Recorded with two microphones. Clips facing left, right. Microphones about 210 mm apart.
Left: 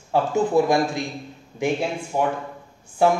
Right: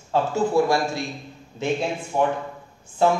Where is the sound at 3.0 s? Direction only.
10° left (ahead or behind).